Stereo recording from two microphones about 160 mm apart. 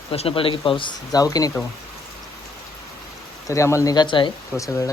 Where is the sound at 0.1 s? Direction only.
35° left (ahead or behind).